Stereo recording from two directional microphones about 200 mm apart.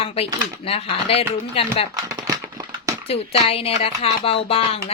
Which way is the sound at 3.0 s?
30° left (ahead or behind).